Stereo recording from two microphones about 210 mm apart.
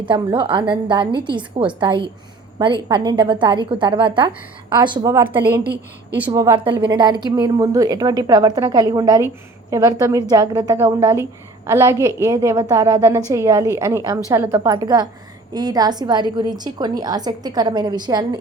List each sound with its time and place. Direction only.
0.0 s a woman's voice: 20° right (ahead or behind)